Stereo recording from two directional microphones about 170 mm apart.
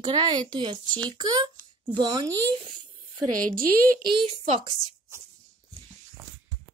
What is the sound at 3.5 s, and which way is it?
Speech, 55° right (ahead or behind).